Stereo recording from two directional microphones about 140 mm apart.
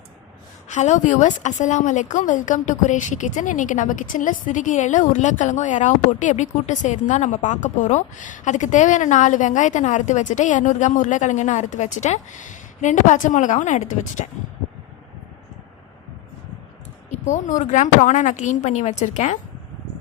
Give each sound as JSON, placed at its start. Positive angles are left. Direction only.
{"t": 0.7, "sound": "a woman's voice", "side_deg": 60}
{"t": 17.2, "sound": "a woman's voice", "side_deg": 60}